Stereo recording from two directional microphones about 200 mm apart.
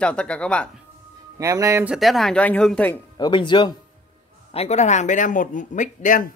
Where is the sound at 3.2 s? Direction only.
25° left (ahead or behind); by 6.2 s 40° left (ahead or behind).